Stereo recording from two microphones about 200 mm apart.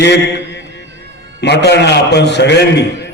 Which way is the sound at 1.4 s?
55° left (ahead or behind).